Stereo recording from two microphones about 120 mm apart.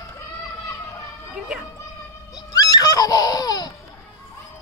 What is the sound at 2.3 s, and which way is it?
Baby laughter, 30° left (ahead or behind).